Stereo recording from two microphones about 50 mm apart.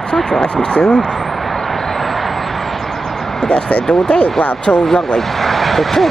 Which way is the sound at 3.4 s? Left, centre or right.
Left.